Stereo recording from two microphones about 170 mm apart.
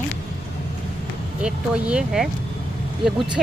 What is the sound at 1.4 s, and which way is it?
Speech, 5° right (ahead or behind).